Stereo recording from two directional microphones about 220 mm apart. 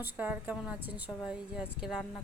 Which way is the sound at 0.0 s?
5° right (ahead or behind).